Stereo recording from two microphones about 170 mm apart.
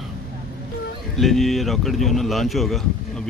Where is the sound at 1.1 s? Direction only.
Centre (ahead or behind).